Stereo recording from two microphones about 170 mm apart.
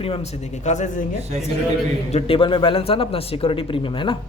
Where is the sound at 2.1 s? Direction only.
30° left (ahead or behind).